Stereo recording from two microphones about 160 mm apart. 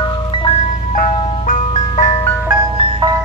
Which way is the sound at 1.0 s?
50° left (ahead or behind).